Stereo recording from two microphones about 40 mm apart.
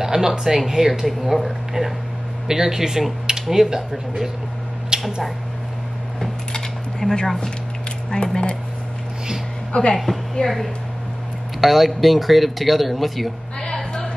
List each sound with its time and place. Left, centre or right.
0.0 s speech: centre
4.9 s a sound: centre
6.5 s cutlery: centre
8.1 s speech: left
9.7 s speech: left
10.3 s speech: centre